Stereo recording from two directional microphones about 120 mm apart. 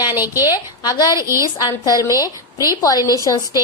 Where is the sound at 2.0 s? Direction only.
25° right (ahead or behind).